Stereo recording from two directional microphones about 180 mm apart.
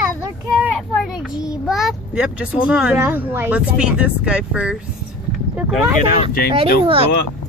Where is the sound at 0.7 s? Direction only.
5° right (ahead or behind).